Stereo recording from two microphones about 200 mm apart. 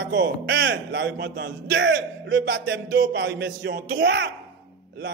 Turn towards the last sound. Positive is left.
turn(degrees=-65)  # may be behind; listen again after turning